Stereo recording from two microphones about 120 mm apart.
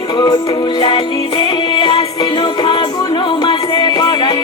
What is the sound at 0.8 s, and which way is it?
Music, 45° left (ahead or behind).